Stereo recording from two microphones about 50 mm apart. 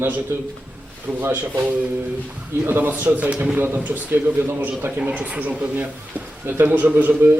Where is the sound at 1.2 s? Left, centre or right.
Right.